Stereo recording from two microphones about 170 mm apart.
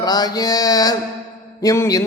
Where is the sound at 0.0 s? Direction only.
25° left (ahead or behind).